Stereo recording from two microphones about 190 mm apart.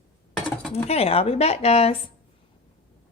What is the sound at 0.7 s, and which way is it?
Speech, 30° left (ahead or behind).